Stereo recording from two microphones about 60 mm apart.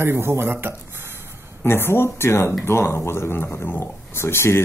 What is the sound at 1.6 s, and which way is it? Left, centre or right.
Speech, left.